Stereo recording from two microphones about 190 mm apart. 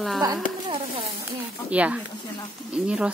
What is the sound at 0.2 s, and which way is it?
Speech, 25° right (ahead or behind).